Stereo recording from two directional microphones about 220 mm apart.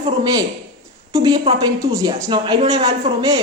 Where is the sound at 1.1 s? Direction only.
20° right (ahead or behind).